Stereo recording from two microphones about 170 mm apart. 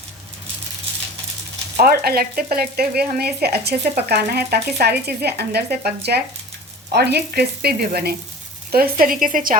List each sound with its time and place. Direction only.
1.8 s speech: 65° right (ahead or behind)